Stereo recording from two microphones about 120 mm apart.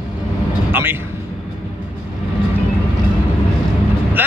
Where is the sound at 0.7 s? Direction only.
15° right (ahead or behind).